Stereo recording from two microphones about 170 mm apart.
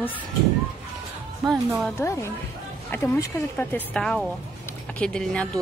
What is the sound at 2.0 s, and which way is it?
Speech, 15° left (ahead or behind).